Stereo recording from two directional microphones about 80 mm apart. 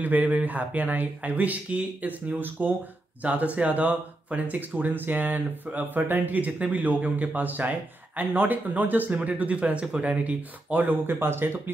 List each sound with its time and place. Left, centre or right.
0.0 s speech: right